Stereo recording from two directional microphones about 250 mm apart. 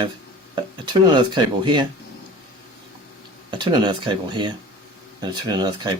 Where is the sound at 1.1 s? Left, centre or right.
Centre.